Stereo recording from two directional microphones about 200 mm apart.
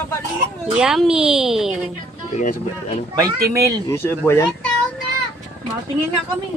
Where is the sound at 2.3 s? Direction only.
35° left (ahead or behind).